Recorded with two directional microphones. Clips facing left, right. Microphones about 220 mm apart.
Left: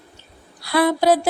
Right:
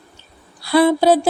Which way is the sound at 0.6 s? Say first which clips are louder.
Right 4 dB; 25° right (ahead or behind).